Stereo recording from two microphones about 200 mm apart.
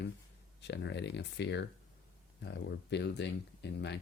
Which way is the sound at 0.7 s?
60° left (ahead or behind).